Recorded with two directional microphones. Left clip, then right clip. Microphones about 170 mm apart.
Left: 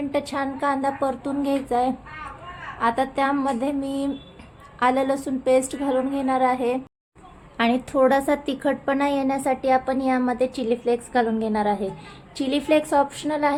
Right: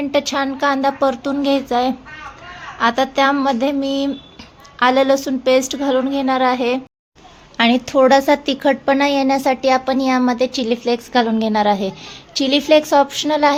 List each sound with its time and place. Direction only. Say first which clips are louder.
0.1 s a woman's voice: right 9 dB; 20° right (ahead or behind)